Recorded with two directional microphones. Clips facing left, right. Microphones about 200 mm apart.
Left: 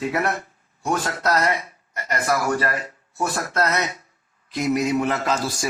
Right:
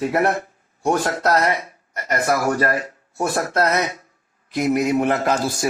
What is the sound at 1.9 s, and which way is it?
Speech, 45° right (ahead or behind).